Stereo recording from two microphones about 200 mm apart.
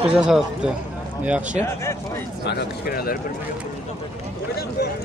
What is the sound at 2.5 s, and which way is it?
Speech, 55° left (ahead or behind).